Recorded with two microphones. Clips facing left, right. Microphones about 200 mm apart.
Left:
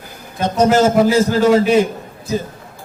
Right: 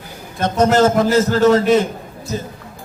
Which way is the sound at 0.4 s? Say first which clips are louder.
Even; 10° left (ahead or behind).